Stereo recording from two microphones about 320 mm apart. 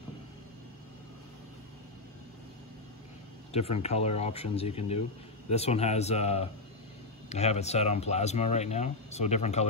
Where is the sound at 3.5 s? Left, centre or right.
Centre.